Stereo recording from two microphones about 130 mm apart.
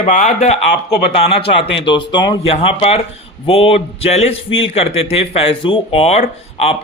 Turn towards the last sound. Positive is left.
turn(degrees=55)  # may be behind; listen again after turning